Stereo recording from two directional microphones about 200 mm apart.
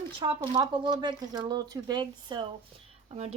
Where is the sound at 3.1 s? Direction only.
30° right (ahead or behind).